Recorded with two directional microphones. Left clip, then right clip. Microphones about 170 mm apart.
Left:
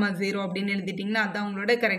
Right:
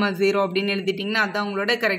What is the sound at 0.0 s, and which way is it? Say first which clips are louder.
A man's voice: right 8 dB; 40° right (ahead or behind).